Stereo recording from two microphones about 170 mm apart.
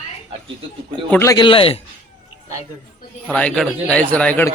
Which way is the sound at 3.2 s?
5° left (ahead or behind).